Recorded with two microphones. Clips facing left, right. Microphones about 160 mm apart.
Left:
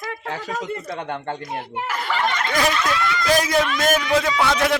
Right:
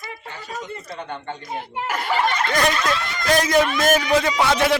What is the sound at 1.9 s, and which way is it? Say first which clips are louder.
Speech: right 3 dB; 45° right (ahead or behind).